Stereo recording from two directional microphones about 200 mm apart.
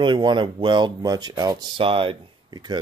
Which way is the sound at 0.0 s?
25° right (ahead or behind).